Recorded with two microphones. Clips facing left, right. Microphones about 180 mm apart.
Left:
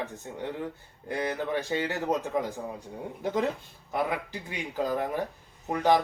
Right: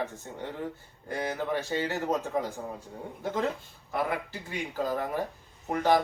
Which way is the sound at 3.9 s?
15° left (ahead or behind).